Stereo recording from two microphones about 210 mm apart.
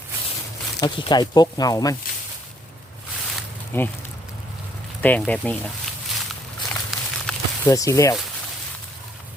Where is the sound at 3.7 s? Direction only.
10° left (ahead or behind).